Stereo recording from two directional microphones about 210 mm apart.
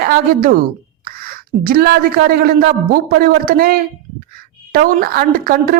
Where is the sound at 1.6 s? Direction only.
45° right (ahead or behind).